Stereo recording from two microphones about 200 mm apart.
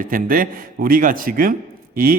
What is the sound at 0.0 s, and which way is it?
A man's voice, 45° right (ahead or behind).